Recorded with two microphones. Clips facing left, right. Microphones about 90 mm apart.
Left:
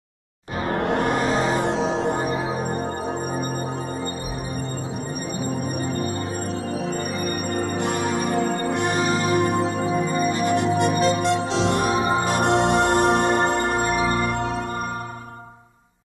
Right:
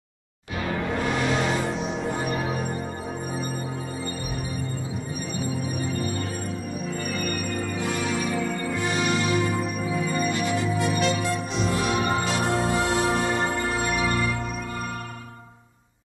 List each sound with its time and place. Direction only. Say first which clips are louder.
0.7 s music: left 5 dB; 55° left (ahead or behind); by 1.6 s 35° left (ahead or behind)
1.6 s music: left 6 dB; 85° left
2.2 s music: left 3 dB; 30° left (ahead or behind)
5.4 s music: left 2 dB; 50° left (ahead or behind)
7.4 s music: left 4 dB; 55° left (ahead or behind)
9.0 s music: left 2 dB; 40° left (ahead or behind)
9.5 s music: left 5 dB; 80° left
10.0 s music: left 4 dB; 40° left (ahead or behind)
10.5 s music: left 5 dB; 60° left (ahead or behind)
11.0 s music: left 4 dB; 40° left (ahead or behind)
11.2 s music: left 6 dB; 85° left
11.8 s music: left 3 dB; 35° left (ahead or behind)
12.4 s music: left 5 dB; 65° left (ahead or behind); by 14.3 s 40° left (ahead or behind)